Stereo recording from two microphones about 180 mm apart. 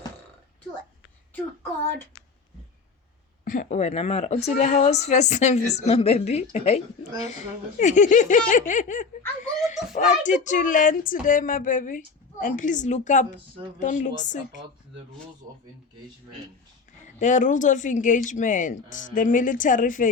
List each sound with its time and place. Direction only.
3.4 s a woman's voice: 50° left (ahead or behind)
17.2 s speech: 45° left (ahead or behind)